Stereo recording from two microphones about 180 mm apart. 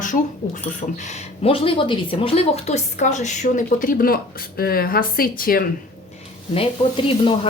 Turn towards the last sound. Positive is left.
turn(degrees=30)  # may be behind; listen again after turning